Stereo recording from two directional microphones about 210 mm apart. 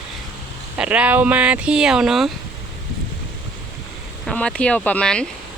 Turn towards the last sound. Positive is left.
turn(degrees=5)  # may be behind; listen again after turning